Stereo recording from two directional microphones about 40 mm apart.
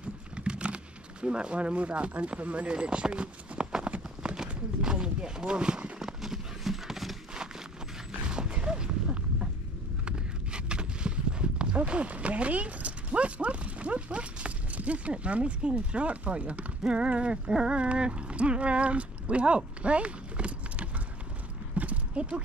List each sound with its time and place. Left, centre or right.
0.4 s a sound: right
1.2 s speech: right
5.9 s horse: centre
8.1 s mechanisms: right
10.0 s clip-clop: right
11.7 s speech: right
21.7 s clip-clop: right